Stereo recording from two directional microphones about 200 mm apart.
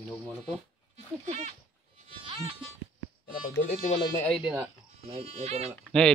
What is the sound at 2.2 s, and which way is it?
Music, 30° right (ahead or behind).